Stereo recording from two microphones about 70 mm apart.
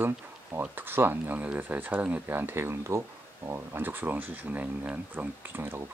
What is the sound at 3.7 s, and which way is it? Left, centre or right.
Speech, right.